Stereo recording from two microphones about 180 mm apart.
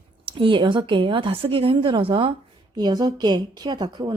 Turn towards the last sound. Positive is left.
turn(degrees=-25)  # may be behind; listen again after turning